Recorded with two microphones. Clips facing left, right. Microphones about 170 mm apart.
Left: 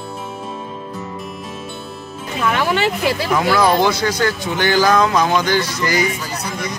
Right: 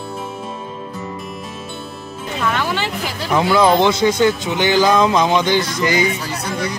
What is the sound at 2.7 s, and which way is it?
Speech, 70° left (ahead or behind).